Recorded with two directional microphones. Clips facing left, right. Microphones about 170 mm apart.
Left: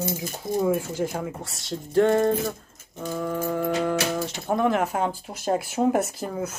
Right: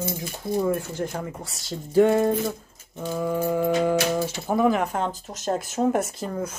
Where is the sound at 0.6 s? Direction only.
5° left (ahead or behind).